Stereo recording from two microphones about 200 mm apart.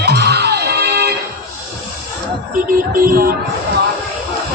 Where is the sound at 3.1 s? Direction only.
45° right (ahead or behind).